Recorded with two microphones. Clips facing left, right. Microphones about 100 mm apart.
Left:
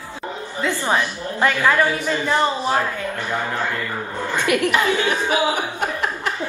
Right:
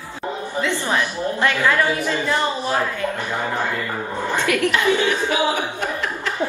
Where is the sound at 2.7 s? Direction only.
15° right (ahead or behind).